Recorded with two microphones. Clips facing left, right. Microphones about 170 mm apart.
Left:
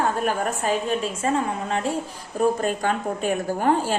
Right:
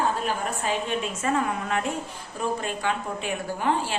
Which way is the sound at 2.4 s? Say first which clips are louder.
Left 6 dB; 45° left (ahead or behind).